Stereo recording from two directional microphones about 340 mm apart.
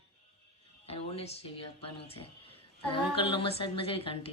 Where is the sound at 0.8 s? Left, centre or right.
Centre.